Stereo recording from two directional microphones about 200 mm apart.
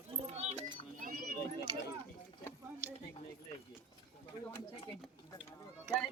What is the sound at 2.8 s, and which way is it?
Speech, 15° right (ahead or behind).